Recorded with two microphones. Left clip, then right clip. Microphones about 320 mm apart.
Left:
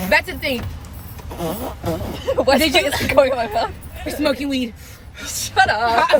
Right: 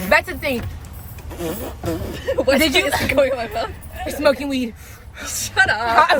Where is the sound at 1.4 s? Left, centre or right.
Centre.